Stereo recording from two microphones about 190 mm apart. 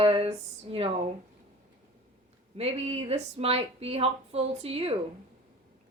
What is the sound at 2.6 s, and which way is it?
A woman's voice, 35° right (ahead or behind).